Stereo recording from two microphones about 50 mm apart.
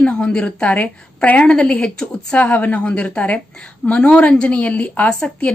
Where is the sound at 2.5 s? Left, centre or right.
Left.